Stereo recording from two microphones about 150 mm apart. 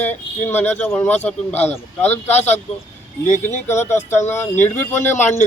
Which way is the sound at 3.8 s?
15° left (ahead or behind).